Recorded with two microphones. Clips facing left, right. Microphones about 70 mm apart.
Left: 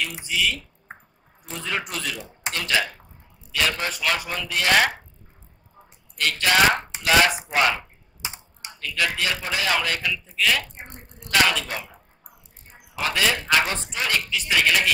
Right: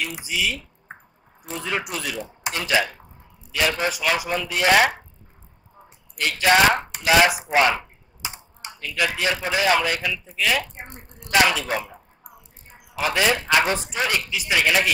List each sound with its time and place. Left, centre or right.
0.0 s speech: centre
6.1 s speech: centre
8.7 s speech: centre
13.0 s speech: centre